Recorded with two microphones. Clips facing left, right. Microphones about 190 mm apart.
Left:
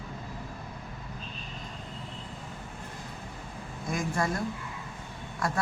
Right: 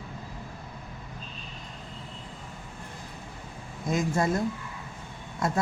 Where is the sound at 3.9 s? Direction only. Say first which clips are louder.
Right 4 dB; 20° right (ahead or behind).